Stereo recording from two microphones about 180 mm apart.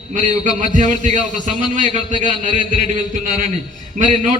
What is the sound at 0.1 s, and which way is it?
A man's voice, 45° right (ahead or behind).